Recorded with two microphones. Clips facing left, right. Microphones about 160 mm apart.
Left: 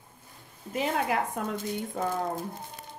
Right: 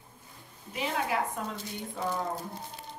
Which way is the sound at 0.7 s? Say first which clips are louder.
Left 3 dB; 55° left (ahead or behind).